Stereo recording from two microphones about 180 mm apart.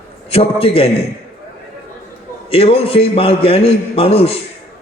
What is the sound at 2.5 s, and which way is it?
A man's voice, 30° left (ahead or behind).